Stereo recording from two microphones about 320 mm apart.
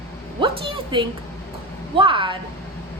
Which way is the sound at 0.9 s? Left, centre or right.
Centre.